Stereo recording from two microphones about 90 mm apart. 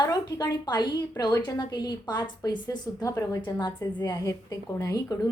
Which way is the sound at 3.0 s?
35° left (ahead or behind).